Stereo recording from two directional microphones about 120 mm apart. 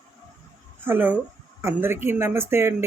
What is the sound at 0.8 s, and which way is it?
Speech, 15° right (ahead or behind).